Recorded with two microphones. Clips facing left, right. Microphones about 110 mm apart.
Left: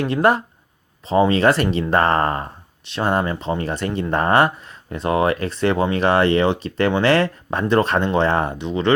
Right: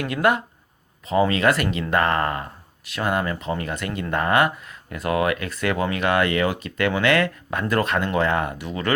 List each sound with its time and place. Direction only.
0.0 s speech: 30° left (ahead or behind)